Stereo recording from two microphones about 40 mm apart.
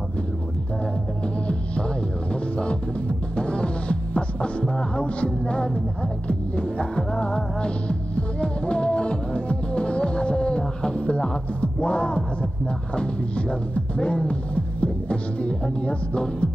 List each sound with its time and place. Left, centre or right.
2.5 s music: left